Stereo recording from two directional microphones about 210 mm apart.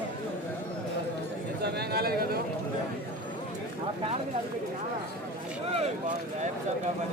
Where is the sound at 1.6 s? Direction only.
50° right (ahead or behind).